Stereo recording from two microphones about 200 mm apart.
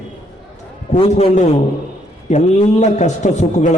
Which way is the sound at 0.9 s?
35° left (ahead or behind).